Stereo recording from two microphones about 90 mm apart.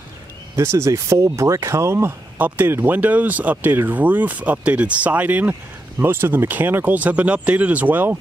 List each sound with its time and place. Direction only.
0.6 s speech: 30° right (ahead or behind)
2.3 s speech: 20° right (ahead or behind)